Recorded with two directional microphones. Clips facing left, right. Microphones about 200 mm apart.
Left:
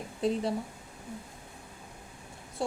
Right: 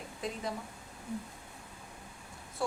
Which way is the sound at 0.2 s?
30° left (ahead or behind).